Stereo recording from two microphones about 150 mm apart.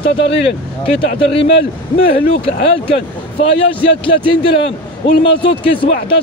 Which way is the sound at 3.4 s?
40° left (ahead or behind).